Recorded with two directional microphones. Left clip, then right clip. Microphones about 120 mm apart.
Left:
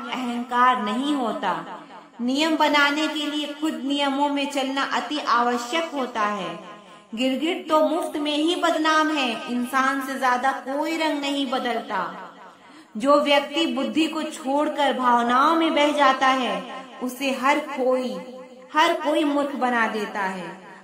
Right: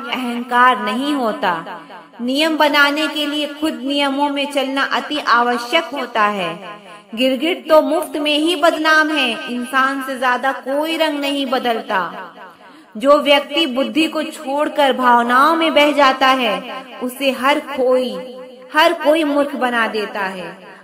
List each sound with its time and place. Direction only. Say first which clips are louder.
0.0 s a man's voice: right 6 dB; 25° right (ahead or behind)
7.2 s a man's voice: right 7 dB; 25° right (ahead or behind)
13.0 s a man's voice: right 6 dB; 15° right (ahead or behind)